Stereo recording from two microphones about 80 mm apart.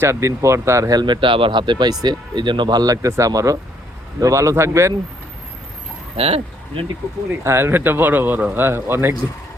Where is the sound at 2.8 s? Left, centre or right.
Right.